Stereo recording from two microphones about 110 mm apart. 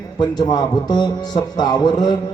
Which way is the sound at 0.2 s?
40° left (ahead or behind).